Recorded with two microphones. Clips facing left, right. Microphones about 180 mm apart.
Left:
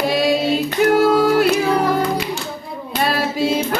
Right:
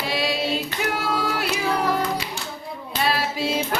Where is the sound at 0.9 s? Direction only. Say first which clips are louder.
Left 14 dB; 45° left (ahead or behind).